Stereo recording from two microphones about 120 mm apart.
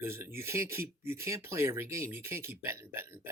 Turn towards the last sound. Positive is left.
turn(degrees=-20)  # may be behind; listen again after turning